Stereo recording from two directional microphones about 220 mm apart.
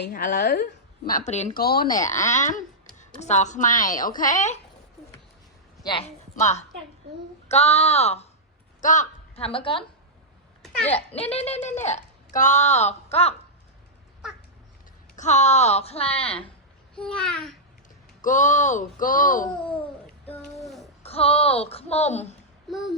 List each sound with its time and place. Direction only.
0.0 s speech: 35° left (ahead or behind)
2.2 s speech: 35° left (ahead or behind)
5.8 s a woman's voice: 25° left (ahead or behind)
10.9 s a woman's voice: 25° left (ahead or behind)
15.1 s a woman's voice: 30° left (ahead or behind)
16.9 s a child's voice: 5° left (ahead or behind)
18.2 s speech: 35° left (ahead or behind)
20.2 s a sound: 5° left (ahead or behind)
21.0 s a woman's voice: 25° left (ahead or behind)
22.7 s a child's voice: centre (ahead or behind)